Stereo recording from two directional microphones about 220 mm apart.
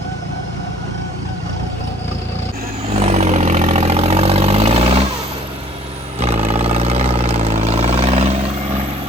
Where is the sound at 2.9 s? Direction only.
30° right (ahead or behind).